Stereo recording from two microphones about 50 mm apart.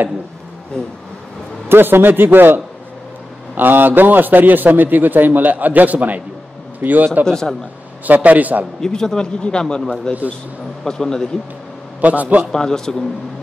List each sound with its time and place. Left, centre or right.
1.7 s a man's voice: right
7.2 s a man's voice: centre
8.1 s a man's voice: right
8.8 s a man's voice: centre
12.0 s a man's voice: right
12.4 s a man's voice: centre